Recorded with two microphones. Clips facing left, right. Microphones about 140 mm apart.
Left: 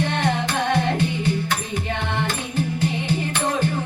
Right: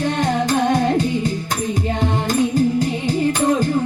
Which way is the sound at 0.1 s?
40° right (ahead or behind).